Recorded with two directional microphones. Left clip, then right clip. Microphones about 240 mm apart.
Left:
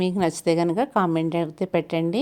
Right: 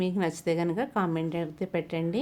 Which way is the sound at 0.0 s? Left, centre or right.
Left.